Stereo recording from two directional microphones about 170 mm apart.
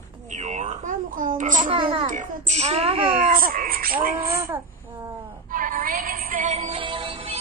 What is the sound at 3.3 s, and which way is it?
Speech, 55° right (ahead or behind).